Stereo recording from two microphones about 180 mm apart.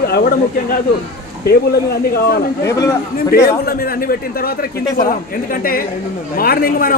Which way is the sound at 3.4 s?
55° left (ahead or behind).